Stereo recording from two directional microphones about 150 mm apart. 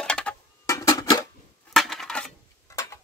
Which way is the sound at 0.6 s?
25° left (ahead or behind).